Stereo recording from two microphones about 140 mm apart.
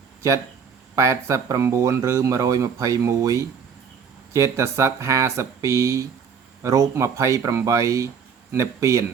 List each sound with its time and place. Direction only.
0.9 s speech: 20° right (ahead or behind)